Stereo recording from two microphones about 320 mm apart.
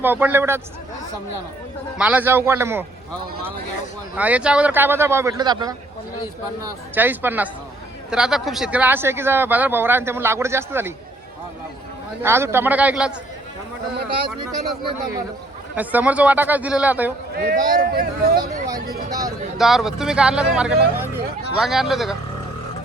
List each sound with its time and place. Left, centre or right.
0.0 s speech: centre
2.0 s speech: centre
4.2 s speech: centre
6.9 s speech: centre
12.2 s speech: centre
15.7 s speech: centre
17.3 s speech: right
19.5 s speech: centre